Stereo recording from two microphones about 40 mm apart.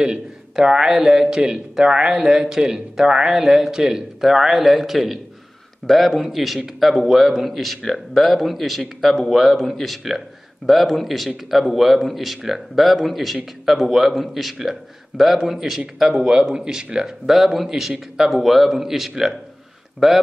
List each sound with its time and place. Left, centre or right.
0.0 s a man's voice: centre
16.2 s speech: centre
17.6 s a man's voice: centre